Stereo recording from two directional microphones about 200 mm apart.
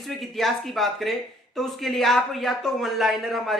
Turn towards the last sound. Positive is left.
turn(degrees=0)  # may be behind; listen again after turning